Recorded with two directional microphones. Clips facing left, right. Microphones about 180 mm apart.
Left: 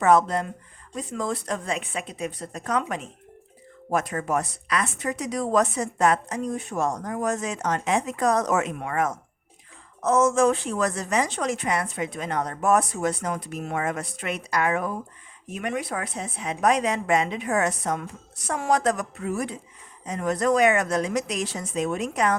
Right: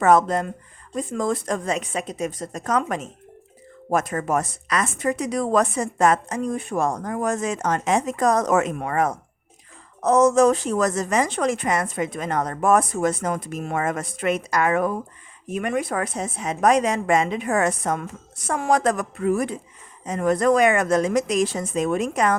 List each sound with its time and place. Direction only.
0.0 s speech: 50° right (ahead or behind)